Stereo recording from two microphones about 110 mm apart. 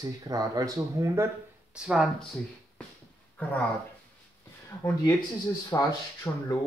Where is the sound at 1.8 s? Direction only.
5° right (ahead or behind).